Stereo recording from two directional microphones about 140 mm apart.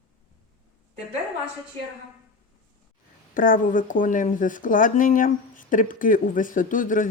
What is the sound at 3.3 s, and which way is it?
Speech, 75° left (ahead or behind).